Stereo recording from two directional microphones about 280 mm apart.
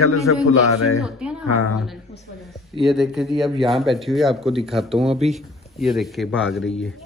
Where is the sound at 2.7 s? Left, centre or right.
Centre.